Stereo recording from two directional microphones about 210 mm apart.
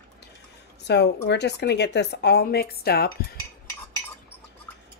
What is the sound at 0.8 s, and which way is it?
Cutlery, 55° left (ahead or behind).